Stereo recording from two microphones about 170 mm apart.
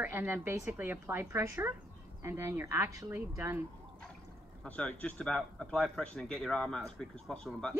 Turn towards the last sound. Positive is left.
turn(degrees=5)  # may be behind; listen again after turning